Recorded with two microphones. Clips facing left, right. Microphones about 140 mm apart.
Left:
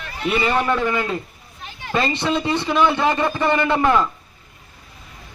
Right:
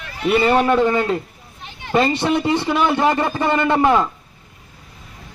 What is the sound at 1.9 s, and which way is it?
Speech, 15° right (ahead or behind).